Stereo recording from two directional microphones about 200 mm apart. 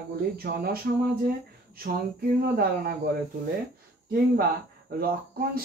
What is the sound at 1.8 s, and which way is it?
Speech, 50° right (ahead or behind).